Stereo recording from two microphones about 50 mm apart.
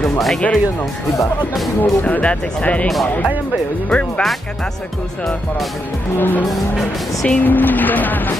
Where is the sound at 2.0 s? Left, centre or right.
Left.